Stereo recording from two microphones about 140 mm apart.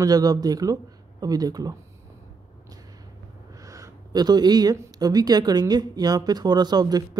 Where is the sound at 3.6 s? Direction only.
25° right (ahead or behind).